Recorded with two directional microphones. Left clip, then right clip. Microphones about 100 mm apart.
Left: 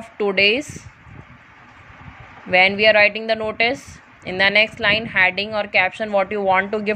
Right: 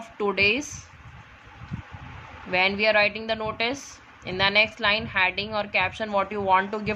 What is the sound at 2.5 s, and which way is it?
A woman's voice, 35° left (ahead or behind).